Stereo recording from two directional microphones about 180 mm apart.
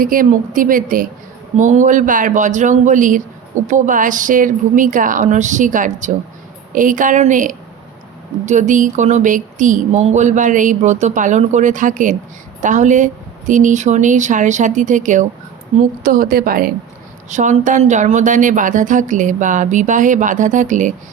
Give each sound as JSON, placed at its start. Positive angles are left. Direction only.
{"t": 0.0, "sound": "a woman's voice", "side_deg": -50}
{"t": 17.2, "sound": "speech", "side_deg": -40}